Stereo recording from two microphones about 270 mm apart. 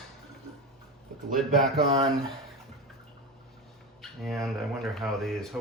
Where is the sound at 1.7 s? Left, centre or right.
Right.